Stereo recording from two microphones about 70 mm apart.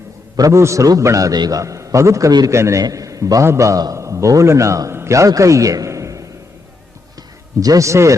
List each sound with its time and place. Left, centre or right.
0.3 s a man's voice: right
0.6 s a man's voice: right
7.6 s a man's voice: right